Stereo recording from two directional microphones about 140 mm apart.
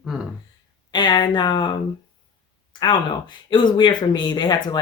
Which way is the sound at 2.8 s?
35° left (ahead or behind).